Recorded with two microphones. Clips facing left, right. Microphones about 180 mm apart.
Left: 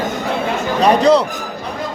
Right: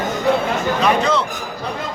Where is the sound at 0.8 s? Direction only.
35° left (ahead or behind).